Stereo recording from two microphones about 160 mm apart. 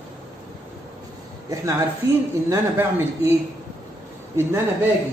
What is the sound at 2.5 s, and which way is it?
Speech, 15° right (ahead or behind).